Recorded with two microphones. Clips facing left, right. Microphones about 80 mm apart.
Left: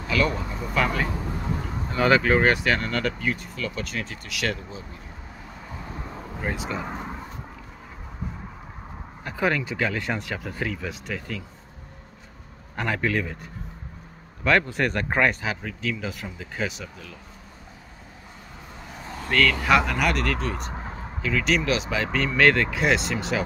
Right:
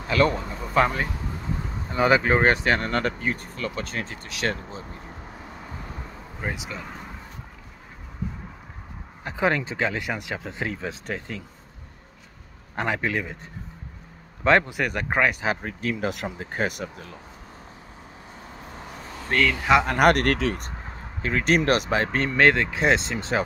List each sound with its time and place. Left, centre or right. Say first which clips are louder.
0.1 s speech: right 3 dB; right
1.9 s speech: even; centre; by 4.8 s right
6.5 s speech: left 1 dB; centre
9.2 s speech: right 1 dB; right
10.7 s speech: right 1 dB; right
12.7 s speech: even; right
14.7 s speech: left 1 dB; centre
15.4 s speech: right 3 dB; right
16.0 s speech: right 5 dB; right
16.3 s speech: right 3 dB; right
19.3 s speech: even; centre
19.9 s speech: right 6 dB; right
21.2 s speech: right 2 dB; right
22.5 s speech: right 1 dB; right